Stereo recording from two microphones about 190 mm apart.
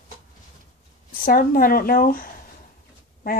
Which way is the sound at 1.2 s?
50° left (ahead or behind).